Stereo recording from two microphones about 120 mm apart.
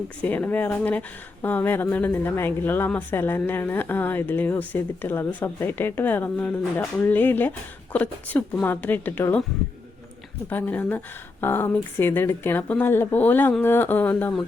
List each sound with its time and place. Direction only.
0.2 s speech: 15° left (ahead or behind)
10.5 s speech: 15° left (ahead or behind)